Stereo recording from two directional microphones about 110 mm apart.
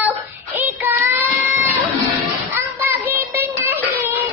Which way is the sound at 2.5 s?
20° right (ahead or behind).